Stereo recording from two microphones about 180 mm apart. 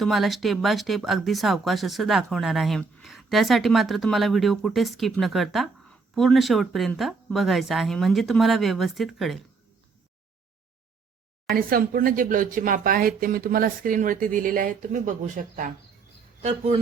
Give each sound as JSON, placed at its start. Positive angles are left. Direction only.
{"t": 0.0, "sound": "speech", "side_deg": 0}
{"t": 11.5, "sound": "speech", "side_deg": -50}